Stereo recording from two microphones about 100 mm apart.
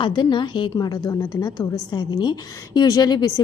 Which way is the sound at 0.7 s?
40° left (ahead or behind).